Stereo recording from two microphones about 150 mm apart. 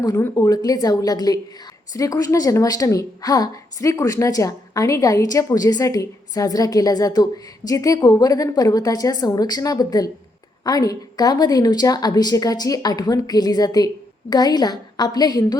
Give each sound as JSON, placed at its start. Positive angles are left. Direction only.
{"t": 0.0, "sound": "a woman's voice", "side_deg": 25}